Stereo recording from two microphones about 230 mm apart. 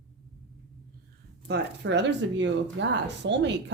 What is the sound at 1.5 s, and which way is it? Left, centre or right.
A woman's voice, right.